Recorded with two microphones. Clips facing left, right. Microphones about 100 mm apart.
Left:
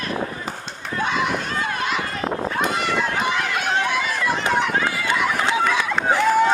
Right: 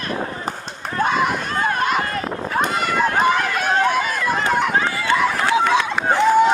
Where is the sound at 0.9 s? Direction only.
45° right (ahead or behind).